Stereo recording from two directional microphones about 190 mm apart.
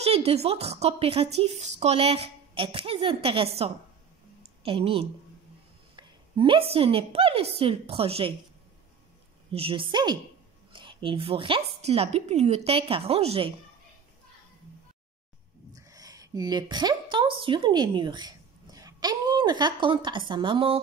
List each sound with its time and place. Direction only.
0.0 s a woman's voice: 35° right (ahead or behind)
9.5 s a woman's voice: 30° right (ahead or behind)
15.7 s a woman's voice: 20° right (ahead or behind)